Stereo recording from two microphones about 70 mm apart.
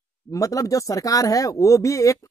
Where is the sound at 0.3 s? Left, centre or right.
Left.